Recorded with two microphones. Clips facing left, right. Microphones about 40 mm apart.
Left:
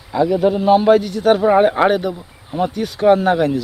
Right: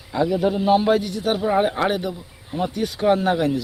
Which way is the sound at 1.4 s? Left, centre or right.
Centre.